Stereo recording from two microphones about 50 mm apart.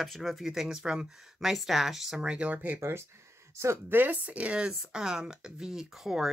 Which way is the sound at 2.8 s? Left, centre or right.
Right.